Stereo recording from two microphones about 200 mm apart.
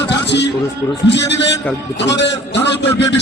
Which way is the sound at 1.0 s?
60° left (ahead or behind).